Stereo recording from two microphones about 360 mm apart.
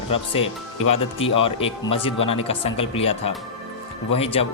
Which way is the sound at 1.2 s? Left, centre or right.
Centre.